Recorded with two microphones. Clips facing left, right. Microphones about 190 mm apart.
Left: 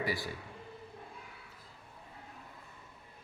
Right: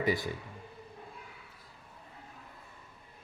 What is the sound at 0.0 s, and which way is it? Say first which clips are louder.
Speech: right 5 dB; 20° right (ahead or behind).